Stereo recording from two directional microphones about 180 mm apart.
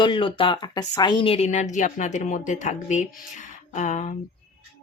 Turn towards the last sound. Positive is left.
turn(degrees=40)  # may be behind; listen again after turning